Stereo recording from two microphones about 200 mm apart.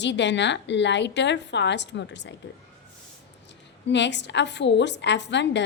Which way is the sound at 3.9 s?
60° left (ahead or behind).